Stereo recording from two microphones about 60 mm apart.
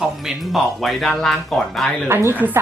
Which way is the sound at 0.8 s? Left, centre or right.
Centre.